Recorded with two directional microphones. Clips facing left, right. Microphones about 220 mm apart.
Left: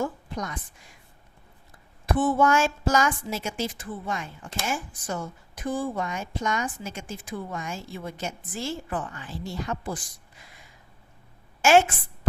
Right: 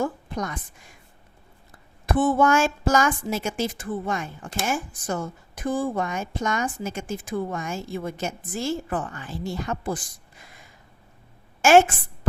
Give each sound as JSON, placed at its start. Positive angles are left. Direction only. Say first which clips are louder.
{"t": 0.0, "sound": "a woman's voice", "louder": "right 3 dB", "side_deg": -50}
{"t": 2.0, "sound": "a woman's voice", "louder": "right 2 dB", "side_deg": -55}